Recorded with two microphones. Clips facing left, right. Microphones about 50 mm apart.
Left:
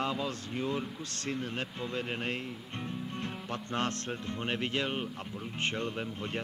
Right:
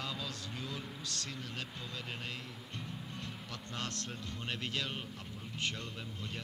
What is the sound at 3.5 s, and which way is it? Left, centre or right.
Speech, left.